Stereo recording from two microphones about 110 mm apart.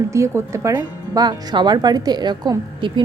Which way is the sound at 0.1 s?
25° right (ahead or behind).